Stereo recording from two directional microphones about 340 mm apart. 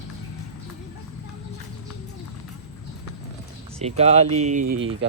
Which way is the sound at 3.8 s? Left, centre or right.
Centre.